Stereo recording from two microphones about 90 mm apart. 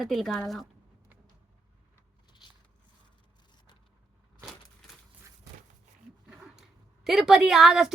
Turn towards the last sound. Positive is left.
turn(degrees=-5)  # may be behind; listen again after turning